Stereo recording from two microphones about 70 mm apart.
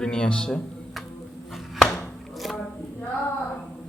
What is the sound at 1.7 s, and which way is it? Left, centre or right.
Chopping, centre.